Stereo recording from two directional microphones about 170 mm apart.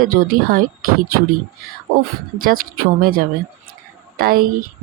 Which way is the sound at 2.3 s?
55° right (ahead or behind).